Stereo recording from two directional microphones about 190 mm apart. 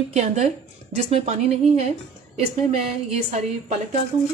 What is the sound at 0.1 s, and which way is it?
Speech, 35° right (ahead or behind).